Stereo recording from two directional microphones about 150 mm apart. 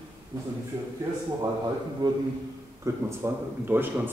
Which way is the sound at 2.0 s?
25° right (ahead or behind).